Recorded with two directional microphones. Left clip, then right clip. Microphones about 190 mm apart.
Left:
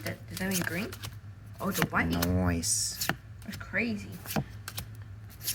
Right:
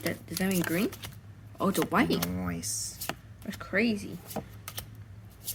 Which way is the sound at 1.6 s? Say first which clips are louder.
Right 3 dB; 55° right (ahead or behind).